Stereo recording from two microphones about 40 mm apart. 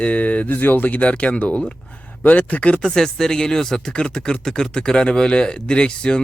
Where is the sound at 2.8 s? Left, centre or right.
Centre.